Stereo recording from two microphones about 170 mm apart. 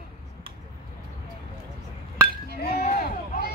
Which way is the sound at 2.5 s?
65° left (ahead or behind).